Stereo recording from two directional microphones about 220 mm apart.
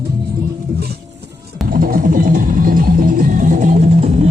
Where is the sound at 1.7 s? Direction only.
40° right (ahead or behind).